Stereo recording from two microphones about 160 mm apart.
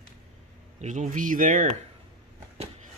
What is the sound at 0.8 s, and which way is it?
Speech, 50° right (ahead or behind).